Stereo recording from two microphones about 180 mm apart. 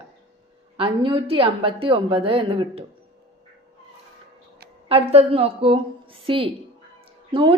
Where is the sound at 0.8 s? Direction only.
30° right (ahead or behind).